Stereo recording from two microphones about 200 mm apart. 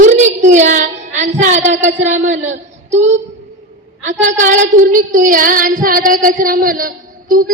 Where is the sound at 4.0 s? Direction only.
35° right (ahead or behind).